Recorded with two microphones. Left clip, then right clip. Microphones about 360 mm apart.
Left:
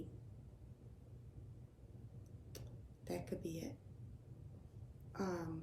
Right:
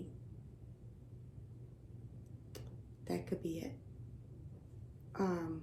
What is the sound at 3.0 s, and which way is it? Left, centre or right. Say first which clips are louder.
Speech: right 5 dB; centre.